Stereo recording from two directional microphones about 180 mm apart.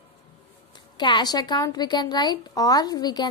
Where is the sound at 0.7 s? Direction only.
25° left (ahead or behind).